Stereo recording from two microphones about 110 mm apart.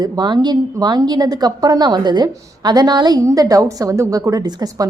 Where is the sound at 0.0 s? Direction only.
40° right (ahead or behind).